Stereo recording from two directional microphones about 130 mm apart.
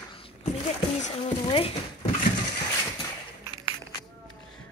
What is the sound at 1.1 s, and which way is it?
Speech, 45° left (ahead or behind).